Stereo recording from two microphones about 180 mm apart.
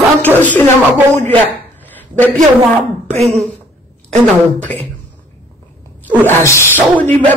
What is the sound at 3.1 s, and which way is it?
Speech, 40° right (ahead or behind).